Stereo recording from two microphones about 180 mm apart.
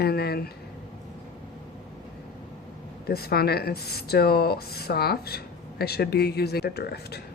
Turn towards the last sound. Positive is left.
turn(degrees=60)  # may be behind; listen again after turning